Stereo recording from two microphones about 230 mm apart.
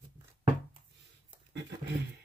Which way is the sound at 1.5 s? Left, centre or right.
Right.